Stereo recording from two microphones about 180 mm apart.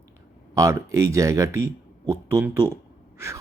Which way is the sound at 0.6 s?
15° right (ahead or behind).